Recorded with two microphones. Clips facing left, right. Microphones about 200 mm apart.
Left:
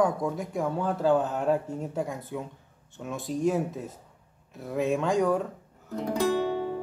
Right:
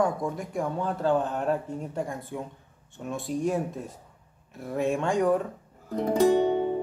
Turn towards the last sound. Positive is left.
turn(degrees=-20)  # may be behind; listen again after turning